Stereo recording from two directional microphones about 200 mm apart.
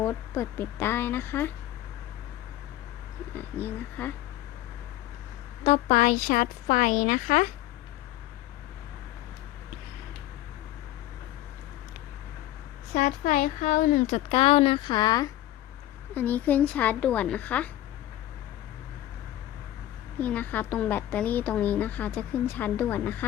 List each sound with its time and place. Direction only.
0.0 s a woman's voice: 10° left (ahead or behind)
3.3 s a woman's voice: 10° left (ahead or behind)
5.6 s speech: 35° left (ahead or behind)
12.9 s speech: 40° left (ahead or behind)
14.3 s speech: 30° left (ahead or behind)
16.1 s a woman's voice: 10° left (ahead or behind)
20.1 s a woman's voice: 10° left (ahead or behind)